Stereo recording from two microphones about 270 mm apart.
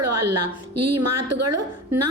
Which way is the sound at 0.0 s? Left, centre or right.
Right.